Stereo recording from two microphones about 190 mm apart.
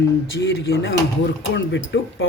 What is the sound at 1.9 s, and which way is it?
Speech, 65° left (ahead or behind).